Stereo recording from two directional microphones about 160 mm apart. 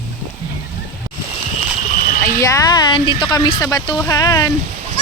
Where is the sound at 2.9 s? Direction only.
30° left (ahead or behind).